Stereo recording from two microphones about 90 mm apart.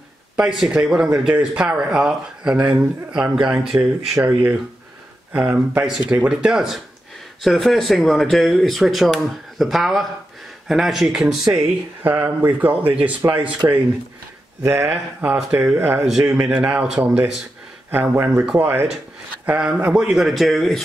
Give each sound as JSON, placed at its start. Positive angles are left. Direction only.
{"t": 0.4, "sound": "speech", "side_deg": -10}
{"t": 4.2, "sound": "speech", "side_deg": -20}
{"t": 14.6, "sound": "speech", "side_deg": -30}
{"t": 16.3, "sound": "speech", "side_deg": -15}
{"t": 17.9, "sound": "speech", "side_deg": -25}
{"t": 19.4, "sound": "speech", "side_deg": -10}